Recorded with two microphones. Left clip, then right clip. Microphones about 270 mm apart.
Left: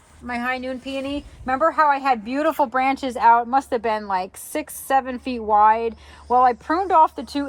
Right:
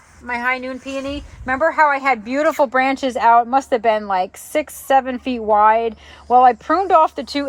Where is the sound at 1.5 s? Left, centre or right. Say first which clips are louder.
Right 2 dB; right.